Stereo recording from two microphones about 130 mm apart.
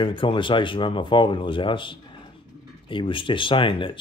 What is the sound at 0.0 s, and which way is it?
Speech, 40° left (ahead or behind).